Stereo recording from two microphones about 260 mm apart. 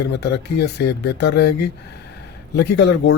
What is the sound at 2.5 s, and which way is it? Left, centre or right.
Speech, left.